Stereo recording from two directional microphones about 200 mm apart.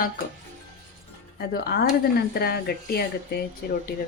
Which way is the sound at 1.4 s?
50° left (ahead or behind).